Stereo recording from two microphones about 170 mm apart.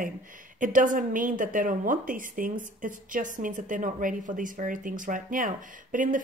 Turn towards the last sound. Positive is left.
turn(degrees=-50)  # may be behind; listen again after turning